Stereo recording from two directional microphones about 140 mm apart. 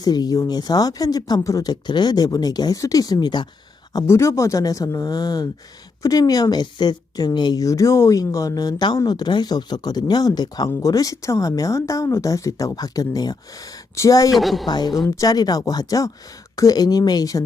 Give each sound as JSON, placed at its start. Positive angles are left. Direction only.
{"t": 0.0, "sound": "a woman's voice", "side_deg": 25}
{"t": 3.9, "sound": "a woman's voice", "side_deg": 20}
{"t": 14.3, "sound": "speech", "side_deg": 0}
{"t": 14.7, "sound": "a woman's voice", "side_deg": 30}